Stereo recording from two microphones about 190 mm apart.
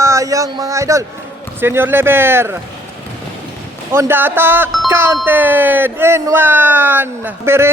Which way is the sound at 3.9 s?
10° right (ahead or behind).